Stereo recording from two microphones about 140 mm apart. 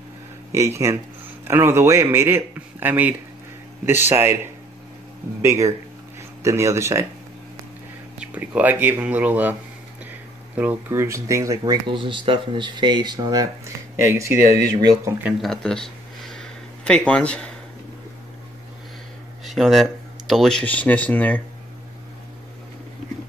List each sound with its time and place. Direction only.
0.5 s speech: 20° right (ahead or behind)
5.4 s speech: 20° right (ahead or behind)
8.2 s speech: 10° right (ahead or behind)
10.9 s speech: 20° right (ahead or behind)
15.4 s a sound: 5° left (ahead or behind)
19.4 s speech: centre (ahead or behind)